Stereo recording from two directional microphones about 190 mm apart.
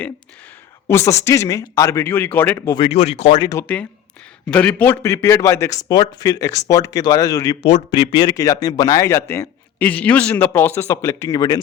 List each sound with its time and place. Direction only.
0.9 s a man's voice: 15° left (ahead or behind)
2.8 s speech: 35° left (ahead or behind)
3.4 s speech: 20° left (ahead or behind)
4.4 s a man's voice: 10° left (ahead or behind)